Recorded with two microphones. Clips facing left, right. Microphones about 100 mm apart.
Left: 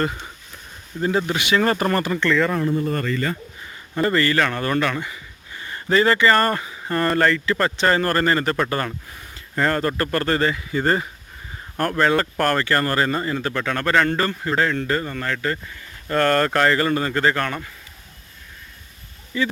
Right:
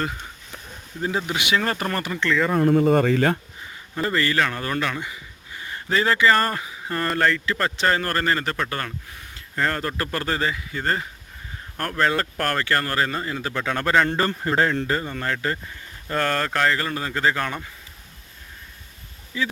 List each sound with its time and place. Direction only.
1.0 s speech: 10° right (ahead or behind)
1.5 s speech: 5° left (ahead or behind)
2.6 s speech: 80° right
3.9 s speech: centre (ahead or behind)
14.1 s speech: 30° right (ahead or behind)
14.8 s speech: 15° right (ahead or behind)
16.0 s speech: 5° right (ahead or behind)
19.3 s speech: 10° right (ahead or behind)